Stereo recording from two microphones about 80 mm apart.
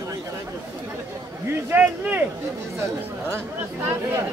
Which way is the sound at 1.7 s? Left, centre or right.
Centre.